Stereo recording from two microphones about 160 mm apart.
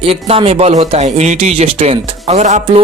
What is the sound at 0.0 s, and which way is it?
Speech, 35° right (ahead or behind).